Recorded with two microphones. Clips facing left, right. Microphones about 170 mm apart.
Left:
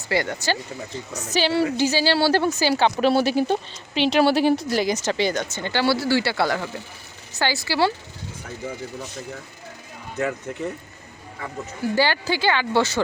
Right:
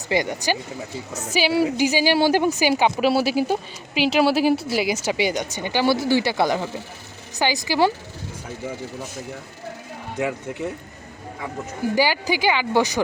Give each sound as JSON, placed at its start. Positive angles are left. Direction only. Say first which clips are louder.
{"t": 0.1, "sound": "a woman's voice", "louder": "right 1 dB", "side_deg": -15}
{"t": 10.2, "sound": "a woman's voice", "louder": "even", "side_deg": -10}
{"t": 11.9, "sound": "a woman's voice", "louder": "right 1 dB", "side_deg": -10}